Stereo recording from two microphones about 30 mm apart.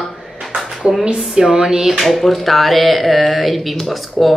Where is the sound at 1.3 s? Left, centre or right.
Centre.